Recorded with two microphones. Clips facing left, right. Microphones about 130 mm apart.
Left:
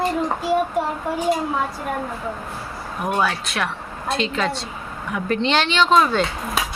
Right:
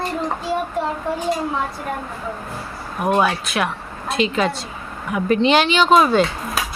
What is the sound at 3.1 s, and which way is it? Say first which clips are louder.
Speech: right 3 dB; 15° right (ahead or behind).